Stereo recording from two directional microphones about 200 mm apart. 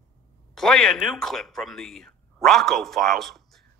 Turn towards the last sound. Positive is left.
turn(degrees=0)  # may be behind; listen again after turning